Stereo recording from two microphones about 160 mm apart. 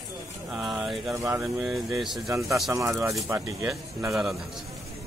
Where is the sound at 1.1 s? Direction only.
15° right (ahead or behind).